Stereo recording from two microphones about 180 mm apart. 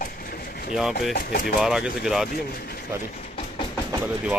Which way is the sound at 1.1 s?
55° left (ahead or behind).